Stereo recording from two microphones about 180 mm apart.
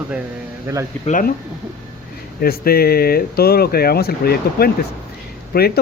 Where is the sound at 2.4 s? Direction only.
55° left (ahead or behind).